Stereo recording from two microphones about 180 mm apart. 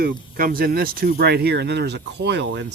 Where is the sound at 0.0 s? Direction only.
55° right (ahead or behind).